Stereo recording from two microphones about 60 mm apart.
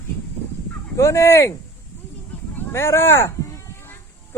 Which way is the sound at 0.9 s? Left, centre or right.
Left.